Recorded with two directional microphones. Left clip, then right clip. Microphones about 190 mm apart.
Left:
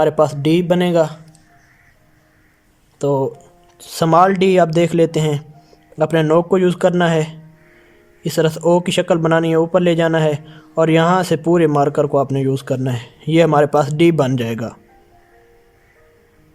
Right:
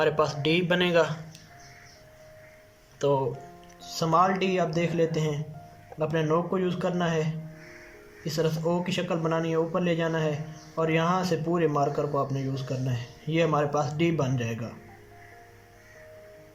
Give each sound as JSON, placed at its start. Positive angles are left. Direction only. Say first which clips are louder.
{"t": 0.0, "sound": "speech", "louder": "left 10 dB", "side_deg": 35}
{"t": 3.0, "sound": "speech", "louder": "left 8 dB", "side_deg": 25}
{"t": 3.8, "sound": "speech", "louder": "left 11 dB", "side_deg": 50}